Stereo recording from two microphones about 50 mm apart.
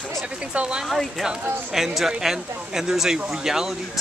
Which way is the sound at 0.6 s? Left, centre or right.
Centre.